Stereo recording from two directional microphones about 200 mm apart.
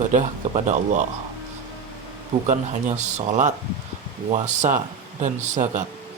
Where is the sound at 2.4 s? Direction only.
35° right (ahead or behind).